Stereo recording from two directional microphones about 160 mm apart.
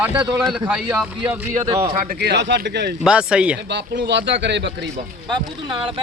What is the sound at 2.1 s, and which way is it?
Speech, 90° right.